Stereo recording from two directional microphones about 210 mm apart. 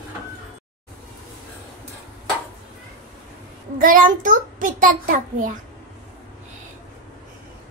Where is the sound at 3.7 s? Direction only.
40° right (ahead or behind).